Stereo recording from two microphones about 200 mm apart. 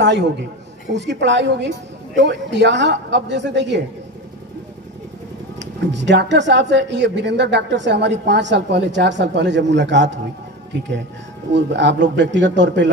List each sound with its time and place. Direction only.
0.0 s a man's voice: 60° right (ahead or behind)
5.6 s speech: 60° right (ahead or behind)
11.5 s speech: 60° right (ahead or behind)